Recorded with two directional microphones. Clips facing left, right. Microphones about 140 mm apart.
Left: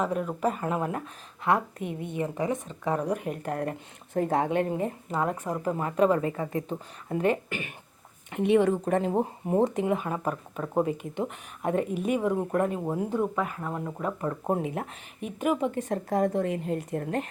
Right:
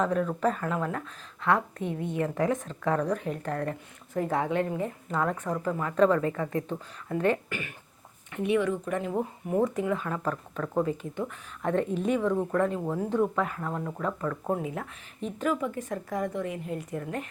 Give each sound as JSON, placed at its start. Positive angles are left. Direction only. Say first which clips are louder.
{"t": 0.0, "sound": "speech", "louder": "right 1 dB", "side_deg": 10}
{"t": 6.1, "sound": "speech", "louder": "even", "side_deg": 25}
{"t": 14.3, "sound": "speech", "louder": "left 4 dB", "side_deg": 25}